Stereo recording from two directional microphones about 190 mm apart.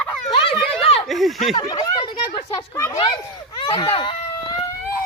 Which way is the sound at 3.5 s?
25° left (ahead or behind).